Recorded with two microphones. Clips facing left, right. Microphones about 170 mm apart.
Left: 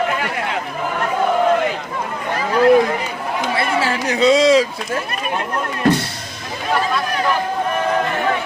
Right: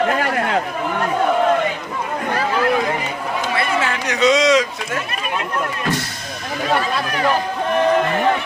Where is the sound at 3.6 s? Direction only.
30° left (ahead or behind).